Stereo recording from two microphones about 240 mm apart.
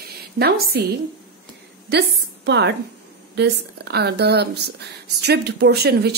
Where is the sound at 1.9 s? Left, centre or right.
Right.